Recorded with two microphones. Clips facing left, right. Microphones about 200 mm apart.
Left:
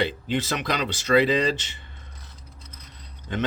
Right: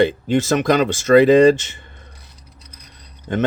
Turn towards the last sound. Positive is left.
turn(degrees=-50)  # may be behind; listen again after turning